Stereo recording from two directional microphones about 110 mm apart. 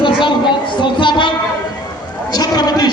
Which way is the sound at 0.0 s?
45° left (ahead or behind).